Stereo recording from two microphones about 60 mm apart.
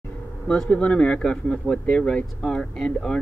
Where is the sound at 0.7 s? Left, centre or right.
Centre.